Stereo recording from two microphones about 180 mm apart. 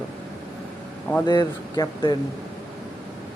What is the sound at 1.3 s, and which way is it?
Speech, 20° left (ahead or behind).